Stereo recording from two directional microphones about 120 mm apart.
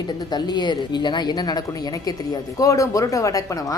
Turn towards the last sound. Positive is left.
turn(degrees=25)  # may be behind; listen again after turning